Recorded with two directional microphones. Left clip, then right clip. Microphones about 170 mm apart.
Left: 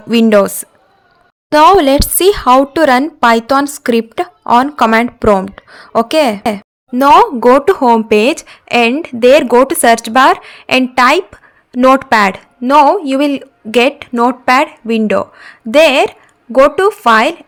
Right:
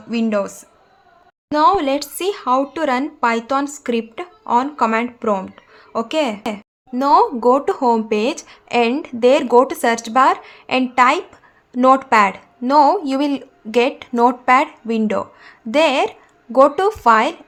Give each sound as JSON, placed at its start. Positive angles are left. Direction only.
{"t": 0.1, "sound": "a woman's voice", "side_deg": 50}